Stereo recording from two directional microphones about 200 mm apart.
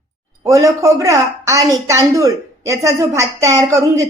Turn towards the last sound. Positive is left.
turn(degrees=-15)  # may be behind; listen again after turning